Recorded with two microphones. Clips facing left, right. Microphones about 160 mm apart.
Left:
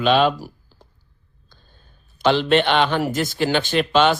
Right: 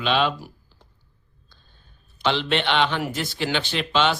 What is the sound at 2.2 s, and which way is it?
Speech, 45° left (ahead or behind).